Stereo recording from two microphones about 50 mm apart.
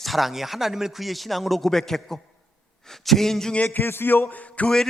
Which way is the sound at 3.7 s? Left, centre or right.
Left.